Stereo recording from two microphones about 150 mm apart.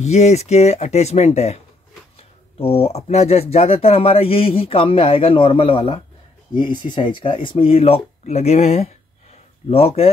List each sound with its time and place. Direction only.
0.0 s speech: 50° left (ahead or behind)